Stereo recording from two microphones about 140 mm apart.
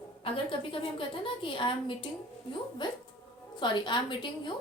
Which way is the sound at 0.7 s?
40° left (ahead or behind).